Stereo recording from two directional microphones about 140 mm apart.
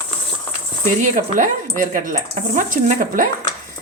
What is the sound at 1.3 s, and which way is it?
Speech, 70° right (ahead or behind).